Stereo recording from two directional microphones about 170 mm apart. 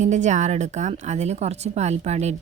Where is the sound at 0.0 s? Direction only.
45° right (ahead or behind).